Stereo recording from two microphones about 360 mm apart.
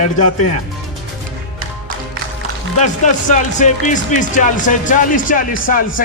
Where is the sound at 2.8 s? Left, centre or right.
Centre.